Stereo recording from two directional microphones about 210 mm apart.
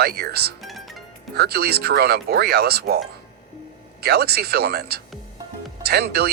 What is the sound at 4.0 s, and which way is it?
Speech, 50° right (ahead or behind).